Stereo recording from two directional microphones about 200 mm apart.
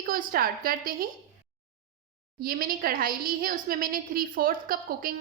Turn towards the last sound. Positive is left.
turn(degrees=-45)  # may be behind; listen again after turning